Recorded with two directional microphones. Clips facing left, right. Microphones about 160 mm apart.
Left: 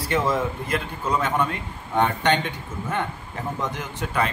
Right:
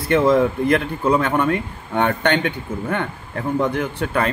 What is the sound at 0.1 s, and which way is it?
A man's voice, 65° right (ahead or behind).